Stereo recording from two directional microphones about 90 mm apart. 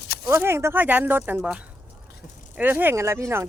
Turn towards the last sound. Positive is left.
turn(degrees=-30)  # may be behind; listen again after turning